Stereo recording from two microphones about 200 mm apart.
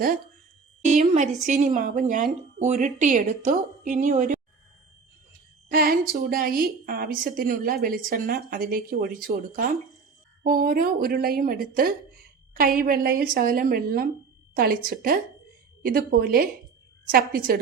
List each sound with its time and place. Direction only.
0.9 s a woman's voice: 40° right (ahead or behind)
5.6 s a woman's voice: 50° right (ahead or behind)